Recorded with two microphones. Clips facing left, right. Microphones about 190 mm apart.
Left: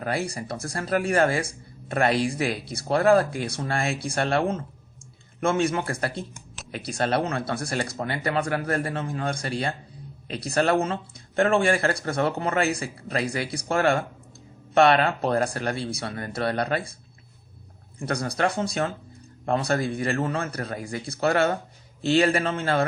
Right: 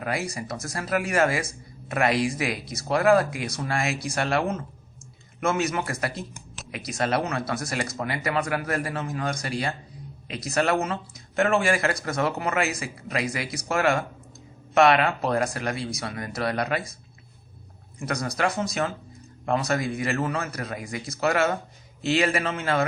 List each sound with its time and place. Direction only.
0.0 s speech: 30° left (ahead or behind)
18.0 s speech: 30° left (ahead or behind)